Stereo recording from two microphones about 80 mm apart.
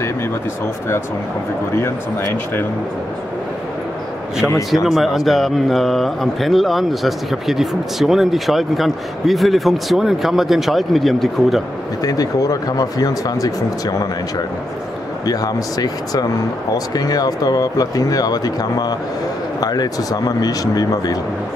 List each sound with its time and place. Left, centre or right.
4.8 s speech: centre
12.0 s speech: left
15.2 s speech: left